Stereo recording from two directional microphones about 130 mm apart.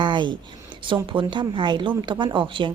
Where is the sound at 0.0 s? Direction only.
35° right (ahead or behind).